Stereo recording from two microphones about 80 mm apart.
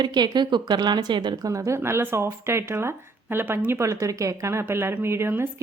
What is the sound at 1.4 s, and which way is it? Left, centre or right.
A woman's voice, right.